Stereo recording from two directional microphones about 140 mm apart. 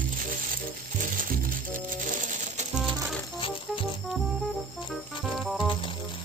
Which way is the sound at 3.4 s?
40° left (ahead or behind).